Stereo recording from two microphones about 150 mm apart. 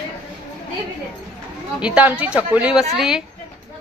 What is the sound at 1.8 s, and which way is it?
Speech, 5° right (ahead or behind).